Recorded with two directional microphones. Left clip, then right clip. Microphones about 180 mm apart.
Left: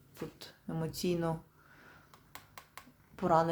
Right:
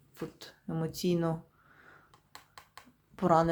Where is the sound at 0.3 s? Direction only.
15° right (ahead or behind).